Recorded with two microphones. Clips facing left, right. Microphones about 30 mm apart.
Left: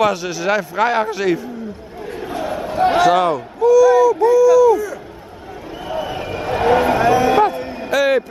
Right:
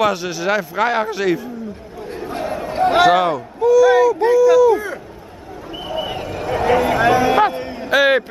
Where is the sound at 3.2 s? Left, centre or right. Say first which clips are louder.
Left 1 dB; centre.